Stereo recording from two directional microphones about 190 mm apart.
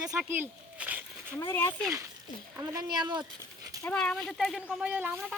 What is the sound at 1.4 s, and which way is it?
Speech, 15° left (ahead or behind).